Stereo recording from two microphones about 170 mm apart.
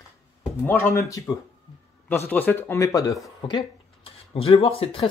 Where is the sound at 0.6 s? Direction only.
15° left (ahead or behind).